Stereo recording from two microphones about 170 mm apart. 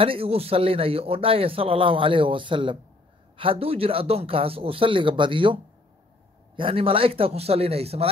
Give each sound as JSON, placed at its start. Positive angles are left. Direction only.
{"t": 0.0, "sound": "a man's voice", "side_deg": -35}